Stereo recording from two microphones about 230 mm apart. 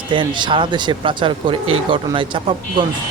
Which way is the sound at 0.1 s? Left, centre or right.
Right.